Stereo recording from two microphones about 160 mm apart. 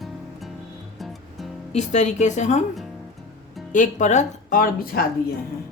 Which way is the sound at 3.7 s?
50° left (ahead or behind).